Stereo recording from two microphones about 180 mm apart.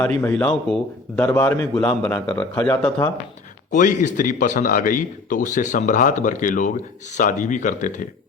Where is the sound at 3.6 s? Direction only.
45° left (ahead or behind).